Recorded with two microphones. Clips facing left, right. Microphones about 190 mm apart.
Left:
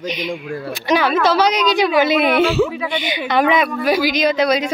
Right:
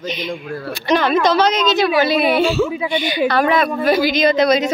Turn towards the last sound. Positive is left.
turn(degrees=10)  # may be behind; listen again after turning